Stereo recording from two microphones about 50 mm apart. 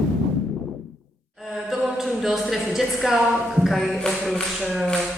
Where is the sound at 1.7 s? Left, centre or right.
Centre.